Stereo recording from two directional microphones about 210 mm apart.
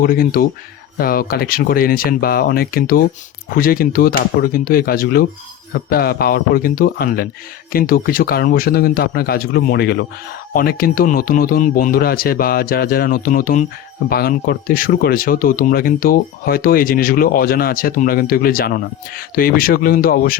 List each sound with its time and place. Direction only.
0.0 s speech: 45° left (ahead or behind)